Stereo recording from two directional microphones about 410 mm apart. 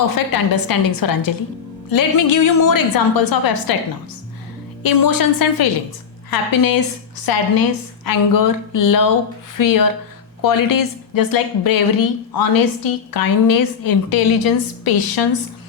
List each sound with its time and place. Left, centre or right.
0.1 s a woman's voice: left
4.8 s a woman's voice: left